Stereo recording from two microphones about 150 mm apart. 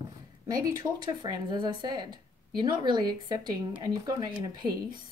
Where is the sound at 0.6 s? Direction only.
25° right (ahead or behind).